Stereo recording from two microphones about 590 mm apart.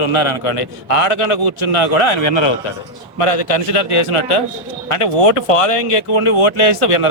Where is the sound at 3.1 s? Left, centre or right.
Left.